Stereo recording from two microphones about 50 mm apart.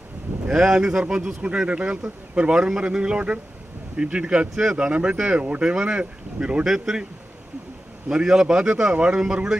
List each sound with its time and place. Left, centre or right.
0.5 s a man's voice: centre
8.1 s a man's voice: centre